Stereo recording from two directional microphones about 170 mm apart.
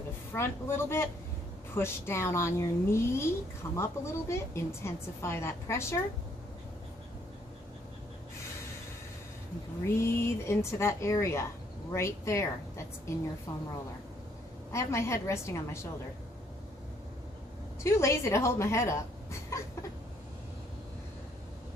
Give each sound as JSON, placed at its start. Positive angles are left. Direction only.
{"t": 0.3, "sound": "a woman's voice", "side_deg": 15}
{"t": 10.0, "sound": "a woman's voice", "side_deg": 15}
{"t": 14.7, "sound": "a woman's voice", "side_deg": 15}
{"t": 17.8, "sound": "a woman's voice", "side_deg": 15}